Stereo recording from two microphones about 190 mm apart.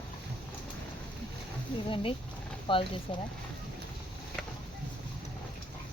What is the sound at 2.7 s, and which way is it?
Speech, 25° left (ahead or behind).